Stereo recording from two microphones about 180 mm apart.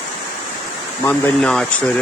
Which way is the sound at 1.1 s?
5° left (ahead or behind).